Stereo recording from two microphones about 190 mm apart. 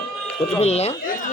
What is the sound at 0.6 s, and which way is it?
Speech, 35° left (ahead or behind).